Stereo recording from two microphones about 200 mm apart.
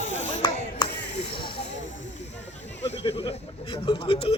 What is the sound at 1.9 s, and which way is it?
Snake, 35° left (ahead or behind).